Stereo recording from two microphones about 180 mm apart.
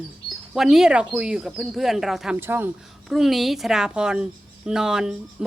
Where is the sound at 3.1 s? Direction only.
Centre (ahead or behind).